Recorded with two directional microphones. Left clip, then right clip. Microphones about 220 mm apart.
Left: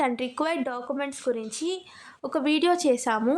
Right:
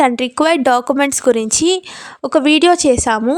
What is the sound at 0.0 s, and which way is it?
A woman's voice, 40° right (ahead or behind).